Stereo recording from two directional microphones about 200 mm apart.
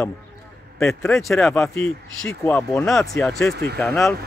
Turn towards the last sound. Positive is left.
turn(degrees=0)  # may be behind; listen again after turning